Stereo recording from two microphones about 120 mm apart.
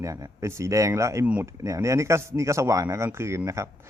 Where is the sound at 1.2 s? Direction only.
10° right (ahead or behind).